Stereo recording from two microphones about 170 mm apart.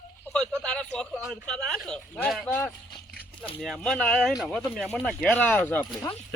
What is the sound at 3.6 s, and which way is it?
Speech, 5° left (ahead or behind).